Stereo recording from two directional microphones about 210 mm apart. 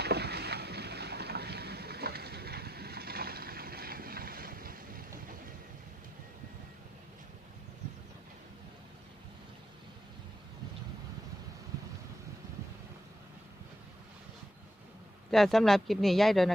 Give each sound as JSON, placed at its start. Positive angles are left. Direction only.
{"t": 0.0, "sound": "boat", "side_deg": -50}
{"t": 15.3, "sound": "speech", "side_deg": 0}